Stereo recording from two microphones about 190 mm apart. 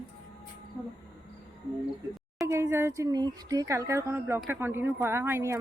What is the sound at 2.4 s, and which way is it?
Speech, 15° right (ahead or behind).